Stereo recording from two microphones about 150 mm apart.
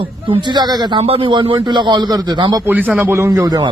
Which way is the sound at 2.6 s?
10° right (ahead or behind).